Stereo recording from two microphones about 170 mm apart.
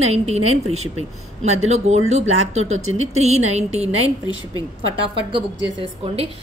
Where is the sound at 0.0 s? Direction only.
40° right (ahead or behind).